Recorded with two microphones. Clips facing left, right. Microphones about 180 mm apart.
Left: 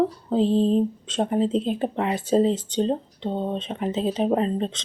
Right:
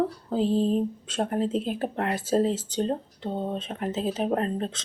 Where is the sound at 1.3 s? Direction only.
5° right (ahead or behind).